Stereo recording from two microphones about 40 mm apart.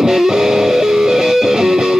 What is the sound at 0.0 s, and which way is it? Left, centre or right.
Music, centre.